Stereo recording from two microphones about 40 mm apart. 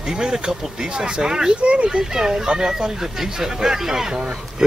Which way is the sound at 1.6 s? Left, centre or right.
Right.